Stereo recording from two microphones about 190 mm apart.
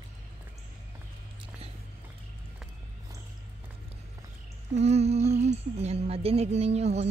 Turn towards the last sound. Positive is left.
turn(degrees=-35)  # may be behind; listen again after turning